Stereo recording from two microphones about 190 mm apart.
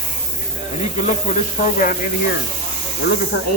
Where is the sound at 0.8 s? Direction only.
35° left (ahead or behind).